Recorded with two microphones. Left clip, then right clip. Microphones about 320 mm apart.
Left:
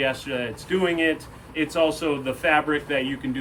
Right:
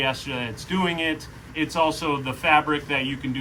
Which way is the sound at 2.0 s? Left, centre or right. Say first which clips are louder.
Left 1 dB; right.